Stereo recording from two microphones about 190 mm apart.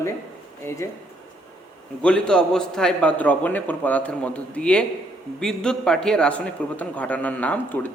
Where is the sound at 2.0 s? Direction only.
5° left (ahead or behind).